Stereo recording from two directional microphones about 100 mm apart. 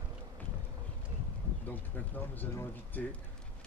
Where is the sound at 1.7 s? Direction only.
20° left (ahead or behind).